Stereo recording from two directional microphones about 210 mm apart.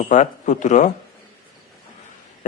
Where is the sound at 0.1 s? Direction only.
35° left (ahead or behind).